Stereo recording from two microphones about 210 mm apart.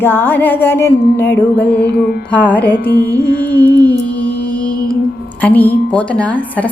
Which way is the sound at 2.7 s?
45° left (ahead or behind).